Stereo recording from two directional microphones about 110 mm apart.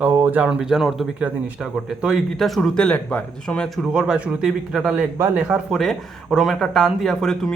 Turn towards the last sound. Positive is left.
turn(degrees=5)  # may be behind; listen again after turning